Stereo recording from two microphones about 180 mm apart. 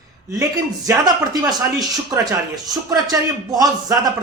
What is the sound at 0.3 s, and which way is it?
Speech, 20° right (ahead or behind).